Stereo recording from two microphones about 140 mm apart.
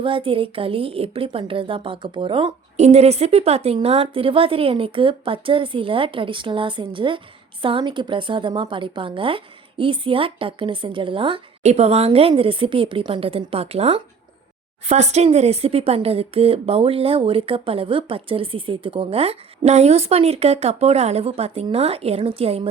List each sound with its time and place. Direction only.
0.0 s a woman's voice: 40° right (ahead or behind)
2.7 s a woman's voice: 50° right (ahead or behind)